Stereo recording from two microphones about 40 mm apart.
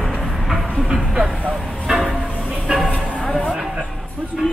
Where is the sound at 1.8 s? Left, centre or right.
Centre.